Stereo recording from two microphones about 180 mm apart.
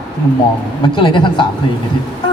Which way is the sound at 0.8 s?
25° left (ahead or behind).